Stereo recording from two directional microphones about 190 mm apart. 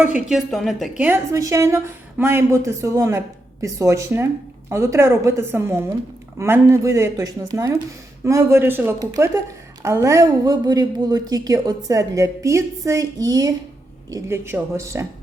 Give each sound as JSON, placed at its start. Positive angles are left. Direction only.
{"t": 0.0, "sound": "a woman's voice", "side_deg": -5}